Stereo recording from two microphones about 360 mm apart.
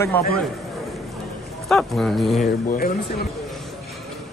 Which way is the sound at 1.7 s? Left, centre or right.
Centre.